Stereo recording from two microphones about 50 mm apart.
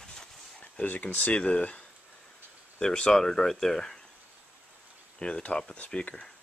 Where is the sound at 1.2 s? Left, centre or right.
Left.